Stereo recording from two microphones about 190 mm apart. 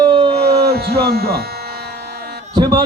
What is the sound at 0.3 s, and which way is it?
Electric shaver, 55° right (ahead or behind).